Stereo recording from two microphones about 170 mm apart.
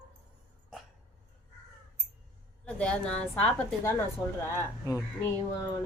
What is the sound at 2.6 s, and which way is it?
A woman's voice, 5° left (ahead or behind).